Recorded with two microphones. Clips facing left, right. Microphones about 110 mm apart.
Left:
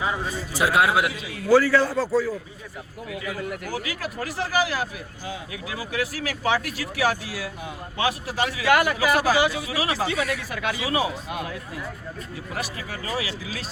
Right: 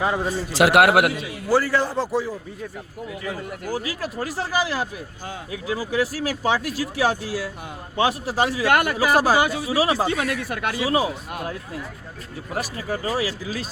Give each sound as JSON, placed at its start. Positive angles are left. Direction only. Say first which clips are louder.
{"t": 0.5, "sound": "a man's voice", "louder": "right 5 dB", "side_deg": -80}
{"t": 1.5, "sound": "a man's voice", "louder": "left 3 dB", "side_deg": -15}
{"t": 3.2, "sound": "speech", "louder": "right 1 dB", "side_deg": -35}
{"t": 8.6, "sound": "speech", "louder": "left 2 dB", "side_deg": -50}
{"t": 9.0, "sound": "speech", "louder": "right 2 dB", "side_deg": -40}
{"t": 10.8, "sound": "speech", "louder": "right 4 dB", "side_deg": -35}
{"t": 12.5, "sound": "speech", "louder": "right 6 dB", "side_deg": -35}